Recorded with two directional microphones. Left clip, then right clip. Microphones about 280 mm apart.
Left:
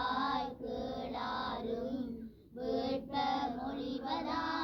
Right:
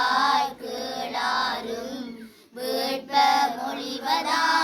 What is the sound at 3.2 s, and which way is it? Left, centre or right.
Child singing, centre.